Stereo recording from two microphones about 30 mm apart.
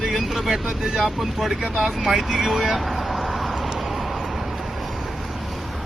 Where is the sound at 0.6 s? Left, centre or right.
Centre.